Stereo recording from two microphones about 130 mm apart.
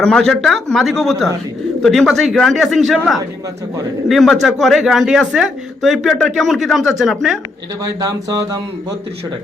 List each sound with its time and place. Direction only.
0.0 s speech: 5° left (ahead or behind)
4.1 s speech: centre (ahead or behind)
8.0 s speech: 30° right (ahead or behind)